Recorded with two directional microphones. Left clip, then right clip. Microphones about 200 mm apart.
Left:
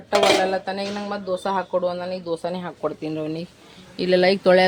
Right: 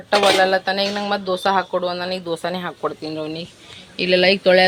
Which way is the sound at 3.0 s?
20° left (ahead or behind).